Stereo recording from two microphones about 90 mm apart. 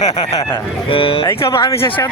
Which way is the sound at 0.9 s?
85° left.